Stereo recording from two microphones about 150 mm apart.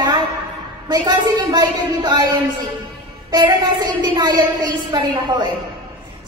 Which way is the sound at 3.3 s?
30° right (ahead or behind).